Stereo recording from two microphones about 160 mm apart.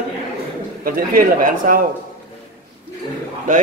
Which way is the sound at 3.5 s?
55° right (ahead or behind).